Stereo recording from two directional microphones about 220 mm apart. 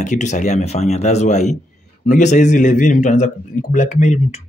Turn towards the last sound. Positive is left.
turn(degrees=30)  # may be behind; listen again after turning